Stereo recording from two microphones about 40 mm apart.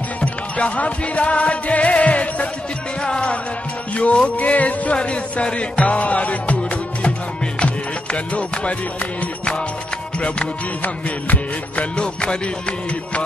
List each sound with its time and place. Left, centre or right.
0.2 s music: left
4.9 s music: left
10.8 s music: left
12.0 s music: left